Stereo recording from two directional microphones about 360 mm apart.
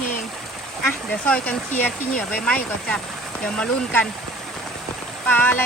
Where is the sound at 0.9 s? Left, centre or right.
Centre.